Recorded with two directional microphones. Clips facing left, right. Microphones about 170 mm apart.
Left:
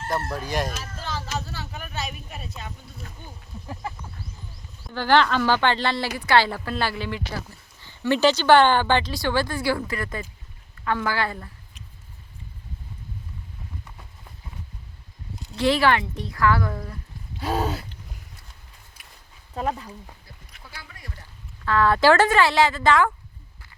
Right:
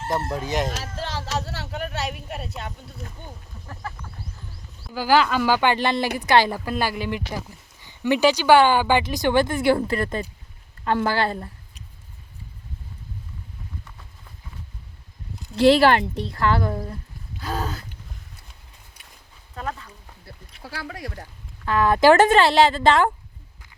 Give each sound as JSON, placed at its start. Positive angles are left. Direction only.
{"t": 0.1, "sound": "speech", "side_deg": -20}
{"t": 1.0, "sound": "a sound", "side_deg": -75}
{"t": 3.7, "sound": "a sound", "side_deg": 15}
{"t": 4.9, "sound": "speech", "side_deg": -5}
{"t": 15.5, "sound": "speech", "side_deg": -35}
{"t": 17.4, "sound": "gasp", "side_deg": 30}
{"t": 19.5, "sound": "gasp", "side_deg": 30}
{"t": 20.6, "sound": "speech", "side_deg": -90}
{"t": 21.6, "sound": "speech", "side_deg": -15}